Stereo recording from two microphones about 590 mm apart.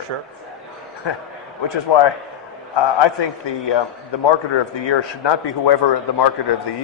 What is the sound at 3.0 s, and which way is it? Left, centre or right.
Speech, left.